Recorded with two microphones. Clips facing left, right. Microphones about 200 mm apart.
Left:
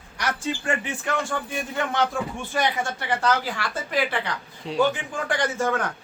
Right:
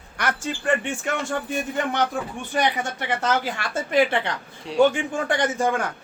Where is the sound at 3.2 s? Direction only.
25° right (ahead or behind).